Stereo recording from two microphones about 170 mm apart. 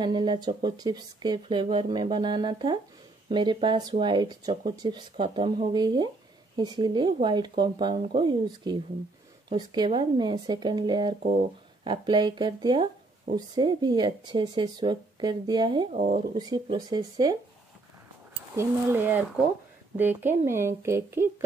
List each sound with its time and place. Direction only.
0.0 s speech: 25° right (ahead or behind)
15.9 s speech: 40° right (ahead or behind)
16.3 s speech: 25° right (ahead or behind)
18.6 s a woman's voice: 15° right (ahead or behind)